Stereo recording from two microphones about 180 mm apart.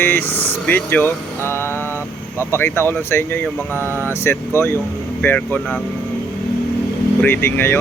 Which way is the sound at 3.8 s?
10° right (ahead or behind).